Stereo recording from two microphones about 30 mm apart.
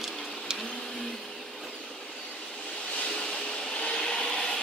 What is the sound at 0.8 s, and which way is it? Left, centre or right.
Vacuum cleaner, centre.